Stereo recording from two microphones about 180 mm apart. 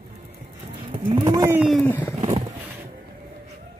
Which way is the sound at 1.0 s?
25° right (ahead or behind).